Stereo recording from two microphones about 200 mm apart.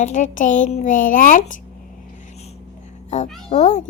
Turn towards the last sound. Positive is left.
turn(degrees=35)  # may be behind; listen again after turning